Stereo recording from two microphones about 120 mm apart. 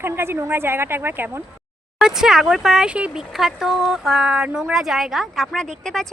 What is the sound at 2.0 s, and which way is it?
Speech, 5° right (ahead or behind).